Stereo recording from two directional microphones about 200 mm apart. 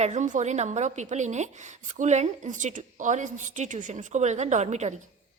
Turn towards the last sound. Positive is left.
turn(degrees=-35)  # may be behind; listen again after turning